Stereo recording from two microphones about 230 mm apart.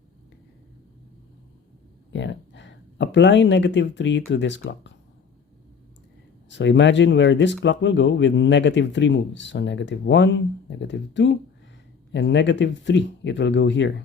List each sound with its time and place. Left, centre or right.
2.1 s speech: left
6.5 s speech: left